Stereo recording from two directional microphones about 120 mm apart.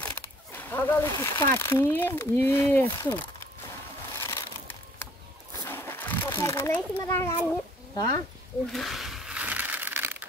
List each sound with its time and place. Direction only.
0.6 s speech: 20° left (ahead or behind)
4.1 s crushing: 25° left (ahead or behind)
5.7 s a sound: 20° left (ahead or behind)
7.0 s speech: 25° left (ahead or behind)
8.7 s crumpling: centre (ahead or behind)